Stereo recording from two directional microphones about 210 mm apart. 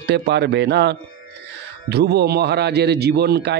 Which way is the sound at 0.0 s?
55° right (ahead or behind).